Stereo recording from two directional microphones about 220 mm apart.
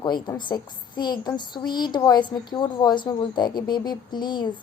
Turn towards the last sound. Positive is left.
turn(degrees=20)  # may be behind; listen again after turning